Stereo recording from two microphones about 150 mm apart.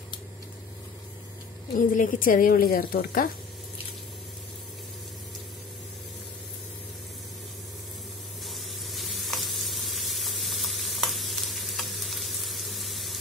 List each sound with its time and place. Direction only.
2.0 s speech: 65° left (ahead or behind)
8.5 s sizzle: centre (ahead or behind)